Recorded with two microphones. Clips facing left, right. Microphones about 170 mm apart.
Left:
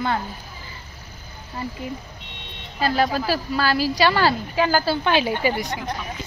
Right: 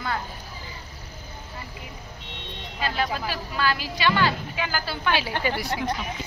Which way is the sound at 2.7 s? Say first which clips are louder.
Left 7 dB; 40° left (ahead or behind).